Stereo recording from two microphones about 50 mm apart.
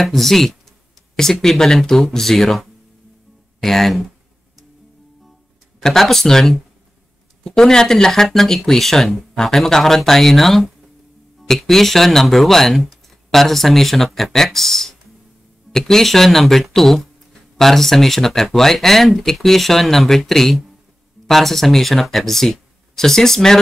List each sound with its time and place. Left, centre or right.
0.0 s speech: centre
5.8 s speech: centre